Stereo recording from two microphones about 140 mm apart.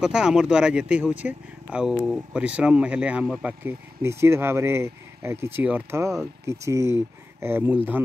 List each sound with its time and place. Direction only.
0.0 s speech: 5° right (ahead or behind)